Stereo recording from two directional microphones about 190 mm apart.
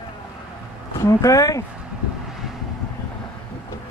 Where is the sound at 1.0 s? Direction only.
20° left (ahead or behind).